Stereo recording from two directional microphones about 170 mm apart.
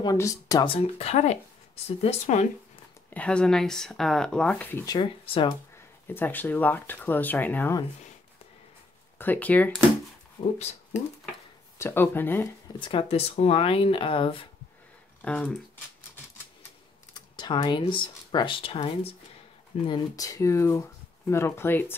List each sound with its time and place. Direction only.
0.0 s speech: 20° left (ahead or behind)
0.7 s speech: 35° left (ahead or behind)
3.1 s speech: 5° left (ahead or behind)
4.8 s speech: 25° left (ahead or behind)
6.0 s speech: 10° left (ahead or behind)
9.2 s speech: 10° left (ahead or behind)
10.4 s speech: 35° left (ahead or behind)
11.8 s speech: 15° left (ahead or behind)
12.7 s speech: 30° left (ahead or behind)
15.2 s speech: 10° left (ahead or behind)
17.1 s speech: 25° left (ahead or behind)
19.9 s speech: 20° left (ahead or behind)